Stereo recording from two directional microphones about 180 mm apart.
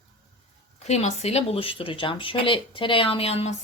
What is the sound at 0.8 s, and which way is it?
Speech, 40° left (ahead or behind).